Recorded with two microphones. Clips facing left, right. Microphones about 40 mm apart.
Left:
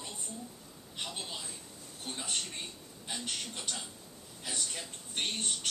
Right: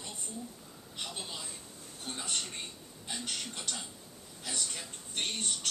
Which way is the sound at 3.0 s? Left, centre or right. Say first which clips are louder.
Even; centre.